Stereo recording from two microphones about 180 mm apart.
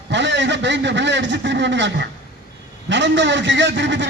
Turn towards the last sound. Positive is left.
turn(degrees=-80)